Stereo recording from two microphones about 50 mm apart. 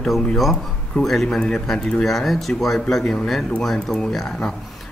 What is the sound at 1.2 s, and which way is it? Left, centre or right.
Speech, centre.